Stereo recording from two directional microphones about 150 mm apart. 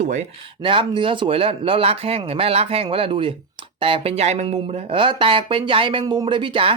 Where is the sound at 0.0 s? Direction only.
55° right (ahead or behind).